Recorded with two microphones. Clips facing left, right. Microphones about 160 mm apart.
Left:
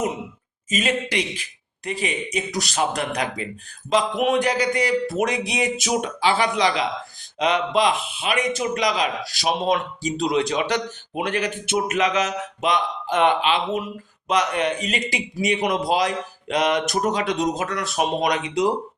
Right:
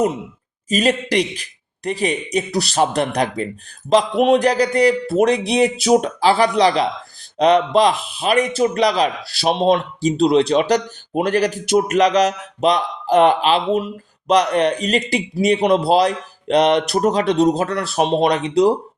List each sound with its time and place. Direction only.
0.7 s a man's voice: 35° right (ahead or behind)